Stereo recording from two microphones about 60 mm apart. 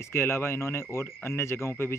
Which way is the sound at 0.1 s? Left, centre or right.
Left.